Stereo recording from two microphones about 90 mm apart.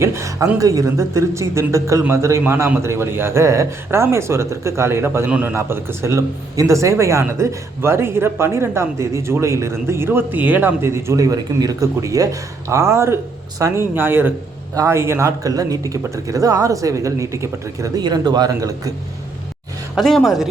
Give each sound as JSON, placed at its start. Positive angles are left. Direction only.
{"t": 0.0, "sound": "a man's voice", "side_deg": -30}
{"t": 5.3, "sound": "a man's voice", "side_deg": -15}
{"t": 5.5, "sound": "a man's voice", "side_deg": -30}
{"t": 15.4, "sound": "speech", "side_deg": -40}
{"t": 18.0, "sound": "speech", "side_deg": -50}
{"t": 20.0, "sound": "speech", "side_deg": 0}